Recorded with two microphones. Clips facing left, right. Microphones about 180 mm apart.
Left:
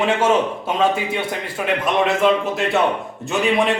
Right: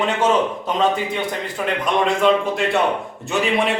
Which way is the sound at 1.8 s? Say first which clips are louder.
Even; 5° left (ahead or behind).